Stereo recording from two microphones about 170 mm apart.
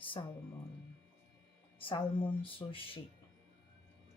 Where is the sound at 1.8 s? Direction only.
30° left (ahead or behind).